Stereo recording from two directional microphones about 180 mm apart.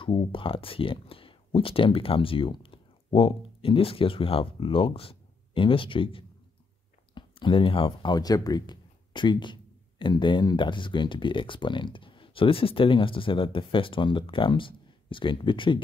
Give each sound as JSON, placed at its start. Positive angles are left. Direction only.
{"t": 0.0, "sound": "speech", "side_deg": 30}